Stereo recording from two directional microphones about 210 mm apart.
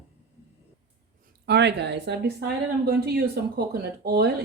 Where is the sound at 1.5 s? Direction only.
55° right (ahead or behind).